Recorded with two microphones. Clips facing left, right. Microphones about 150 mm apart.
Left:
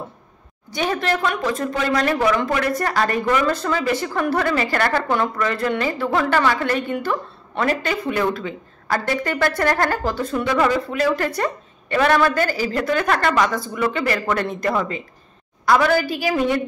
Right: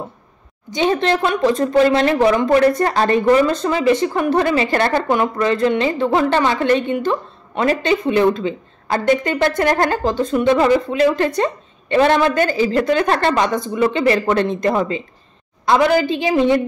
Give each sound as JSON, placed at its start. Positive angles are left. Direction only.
{"t": 0.7, "sound": "speech", "side_deg": -20}